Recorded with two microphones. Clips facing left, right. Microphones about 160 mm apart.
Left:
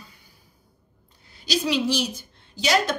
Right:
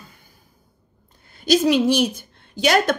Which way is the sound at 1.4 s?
50° right (ahead or behind).